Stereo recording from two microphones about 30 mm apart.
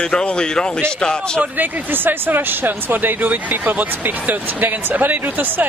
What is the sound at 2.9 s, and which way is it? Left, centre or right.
Speech, right.